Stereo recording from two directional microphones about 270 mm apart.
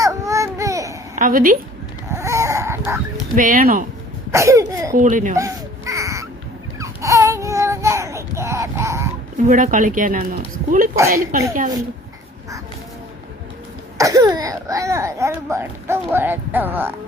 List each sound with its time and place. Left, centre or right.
0.0 s a sound: centre
1.1 s a woman's voice: right
2.0 s chicken: centre
3.3 s speech: right
4.3 s speech: centre
4.9 s speech: right
5.4 s baby cry: centre
9.5 s speech: right
14.0 s speech: centre